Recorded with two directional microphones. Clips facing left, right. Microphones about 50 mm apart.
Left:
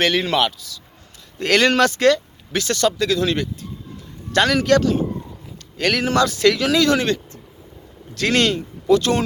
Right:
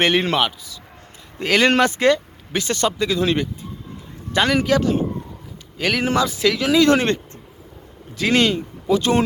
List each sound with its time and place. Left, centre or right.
0.0 s speech: right
0.3 s speech: centre
1.6 s a man's voice: right
5.7 s speech: centre
6.8 s speech: right
8.1 s speech: centre